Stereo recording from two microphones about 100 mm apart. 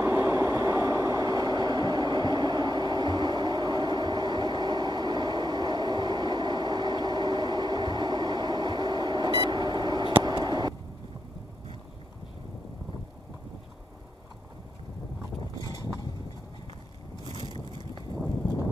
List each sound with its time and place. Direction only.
0.0 s vehicle: 20° right (ahead or behind); by 9.6 s 55° right (ahead or behind)
9.6 s beep: 45° right (ahead or behind)
10.2 s a sound: 45° right (ahead or behind)